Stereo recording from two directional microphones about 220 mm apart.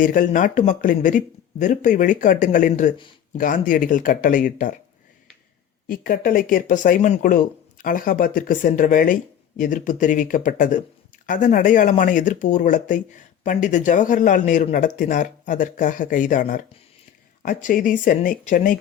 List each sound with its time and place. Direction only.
0.0 s speech: 35° left (ahead or behind)
5.9 s speech: 40° left (ahead or behind)